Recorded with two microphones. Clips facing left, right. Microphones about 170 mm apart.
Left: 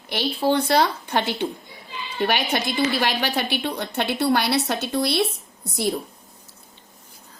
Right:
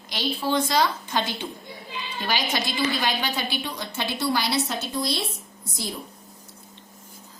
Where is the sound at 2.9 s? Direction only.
65° left (ahead or behind).